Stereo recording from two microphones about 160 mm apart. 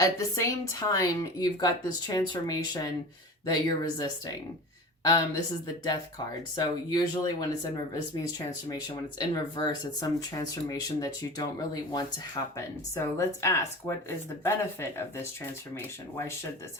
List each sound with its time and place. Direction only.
0.0 s speech: 20° left (ahead or behind)
9.1 s speech: 25° left (ahead or behind)